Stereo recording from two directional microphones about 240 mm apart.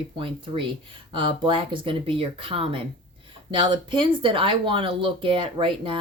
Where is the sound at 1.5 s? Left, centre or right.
Right.